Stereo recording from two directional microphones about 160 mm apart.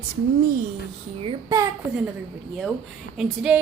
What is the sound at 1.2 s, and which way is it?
Speech, 35° right (ahead or behind).